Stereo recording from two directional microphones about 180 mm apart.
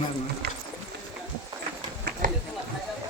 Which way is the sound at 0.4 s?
65° right (ahead or behind).